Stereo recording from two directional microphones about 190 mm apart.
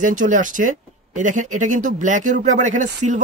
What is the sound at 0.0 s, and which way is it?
Speech, 45° right (ahead or behind).